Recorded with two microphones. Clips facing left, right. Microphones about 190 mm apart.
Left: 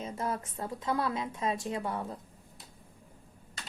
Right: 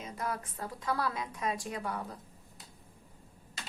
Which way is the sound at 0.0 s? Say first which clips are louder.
Left 3 dB; 25° left (ahead or behind).